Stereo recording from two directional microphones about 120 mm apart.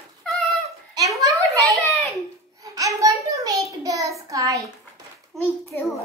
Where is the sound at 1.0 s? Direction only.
30° right (ahead or behind).